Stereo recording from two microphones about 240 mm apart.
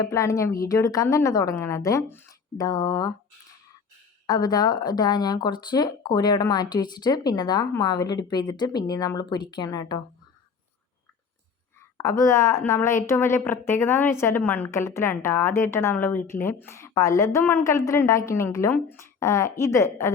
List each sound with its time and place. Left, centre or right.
0.0 s a woman's voice: centre
4.3 s a woman's voice: centre
11.9 s a woman's voice: centre